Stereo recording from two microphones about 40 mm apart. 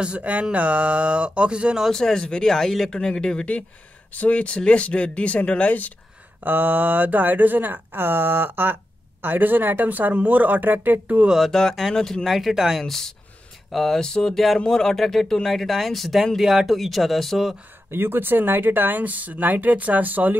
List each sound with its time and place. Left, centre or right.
0.0 s speech: right
1.9 s speech: centre
2.1 s speech: centre
2.5 s speech: centre
3.0 s speech: left
4.1 s speech: left
6.4 s speech: right
11.5 s speech: centre
12.3 s speech: centre
12.8 s speech: centre
13.9 s speech: centre
14.3 s speech: centre
14.7 s speech: centre
17.9 s speech: right